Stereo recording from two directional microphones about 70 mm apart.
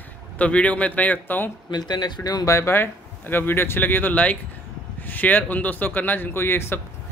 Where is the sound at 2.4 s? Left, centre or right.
Left.